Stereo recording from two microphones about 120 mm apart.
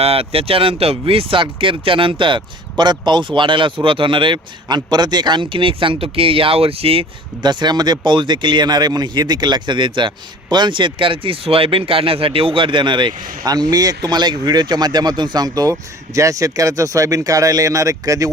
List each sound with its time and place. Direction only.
0.0 s speech: 55° right (ahead or behind)
7.4 s speech: 35° right (ahead or behind)